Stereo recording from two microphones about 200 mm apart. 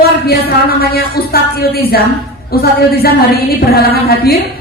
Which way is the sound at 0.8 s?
50° left (ahead or behind).